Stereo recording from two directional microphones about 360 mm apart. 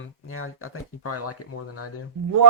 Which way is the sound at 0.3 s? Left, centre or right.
Left.